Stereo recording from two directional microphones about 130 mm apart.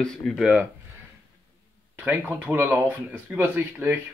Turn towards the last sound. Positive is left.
turn(degrees=-15)  # may be behind; listen again after turning